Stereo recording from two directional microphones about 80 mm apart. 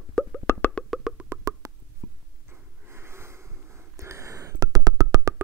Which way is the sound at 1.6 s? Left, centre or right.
Right.